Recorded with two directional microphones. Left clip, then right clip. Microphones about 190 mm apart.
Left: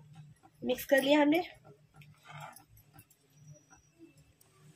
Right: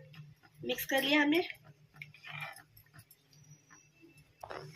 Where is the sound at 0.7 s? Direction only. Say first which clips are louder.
Left 4 dB; 70° left (ahead or behind).